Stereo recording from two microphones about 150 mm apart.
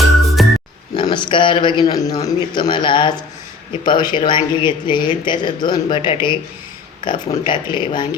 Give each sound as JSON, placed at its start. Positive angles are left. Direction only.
{"t": 0.4, "sound": "music", "side_deg": 0}
{"t": 0.9, "sound": "a man's voice", "side_deg": 30}